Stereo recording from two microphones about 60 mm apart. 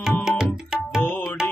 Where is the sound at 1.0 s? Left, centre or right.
Left.